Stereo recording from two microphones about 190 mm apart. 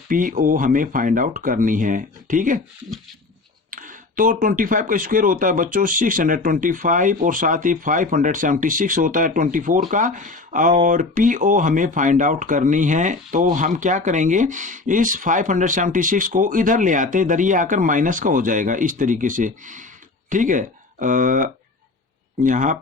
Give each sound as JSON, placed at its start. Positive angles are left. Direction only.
{"t": 0.1, "sound": "speech", "side_deg": -45}
{"t": 3.7, "sound": "speech", "side_deg": -45}